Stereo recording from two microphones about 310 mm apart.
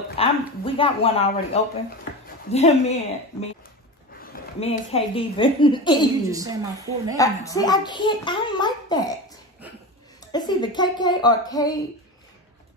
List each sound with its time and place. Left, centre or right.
0.2 s a child's voice: centre
6.2 s a woman's voice: centre
7.2 s a child's voice: centre
10.2 s a child's voice: centre